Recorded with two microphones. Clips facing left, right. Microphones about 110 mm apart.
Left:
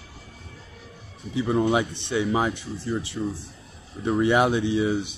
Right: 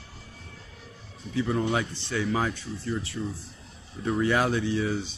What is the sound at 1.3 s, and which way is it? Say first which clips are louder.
Speech: left 4 dB; 20° left (ahead or behind).